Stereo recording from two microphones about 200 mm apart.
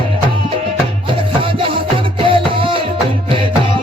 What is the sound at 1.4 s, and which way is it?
Music, 25° right (ahead or behind).